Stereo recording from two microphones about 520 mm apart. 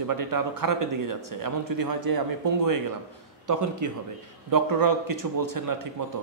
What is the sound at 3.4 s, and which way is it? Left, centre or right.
Speech, right.